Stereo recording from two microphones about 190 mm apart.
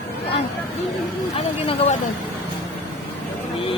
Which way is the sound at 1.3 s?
30° left (ahead or behind).